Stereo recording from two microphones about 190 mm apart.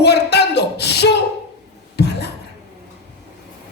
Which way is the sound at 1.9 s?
60° left (ahead or behind).